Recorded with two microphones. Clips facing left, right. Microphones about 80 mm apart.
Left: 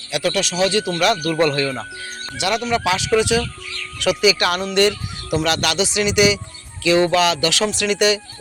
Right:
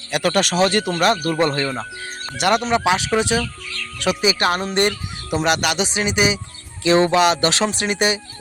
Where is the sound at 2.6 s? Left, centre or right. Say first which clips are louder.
Right 2 dB; right.